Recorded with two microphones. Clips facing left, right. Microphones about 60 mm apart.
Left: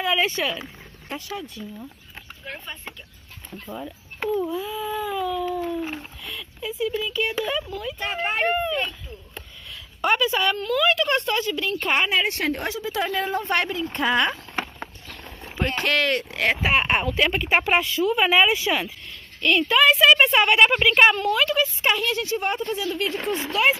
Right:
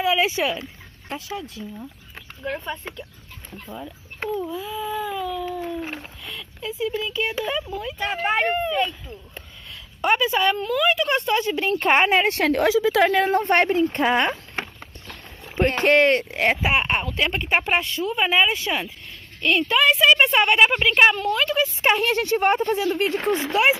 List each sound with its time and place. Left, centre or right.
0.0 s a woman's voice: centre
4.3 s a woman's voice: centre
10.2 s speech: right
10.7 s a woman's voice: centre
11.3 s speech: right
12.3 s a woman's voice: right
13.5 s speech: right
15.5 s speech: right
15.8 s speech: right
16.6 s a woman's voice: centre
16.9 s speech: centre
17.2 s a woman's voice: centre
21.8 s speech: right
22.1 s speech: right